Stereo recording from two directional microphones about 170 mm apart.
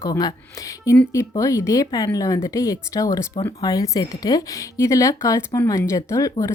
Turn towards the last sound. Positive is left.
turn(degrees=20)  # may be behind; listen again after turning